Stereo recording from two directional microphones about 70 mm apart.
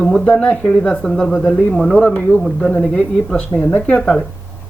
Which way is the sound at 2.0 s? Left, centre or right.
Centre.